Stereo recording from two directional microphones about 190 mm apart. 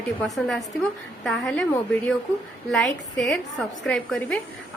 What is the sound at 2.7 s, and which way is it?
Speech, centre (ahead or behind).